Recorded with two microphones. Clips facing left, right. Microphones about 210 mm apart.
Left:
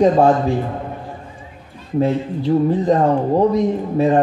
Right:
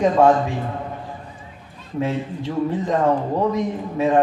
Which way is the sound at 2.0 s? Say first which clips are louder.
Left 5 dB; 35° left (ahead or behind).